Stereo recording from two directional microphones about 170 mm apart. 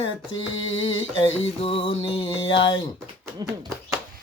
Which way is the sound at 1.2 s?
35° left (ahead or behind).